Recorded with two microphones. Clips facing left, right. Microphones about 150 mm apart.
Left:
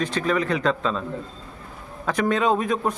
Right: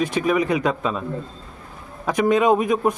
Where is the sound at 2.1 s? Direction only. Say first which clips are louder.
Right 4 dB; 15° right (ahead or behind).